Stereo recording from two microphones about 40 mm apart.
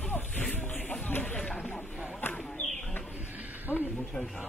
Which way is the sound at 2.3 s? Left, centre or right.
Left.